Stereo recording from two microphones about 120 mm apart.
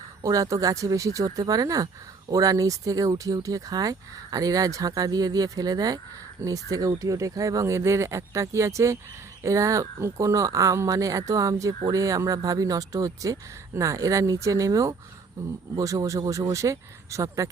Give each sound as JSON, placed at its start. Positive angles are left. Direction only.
{"t": 0.2, "sound": "speech", "side_deg": -25}